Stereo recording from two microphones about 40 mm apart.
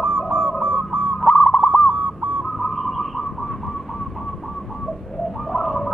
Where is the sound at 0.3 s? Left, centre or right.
Right.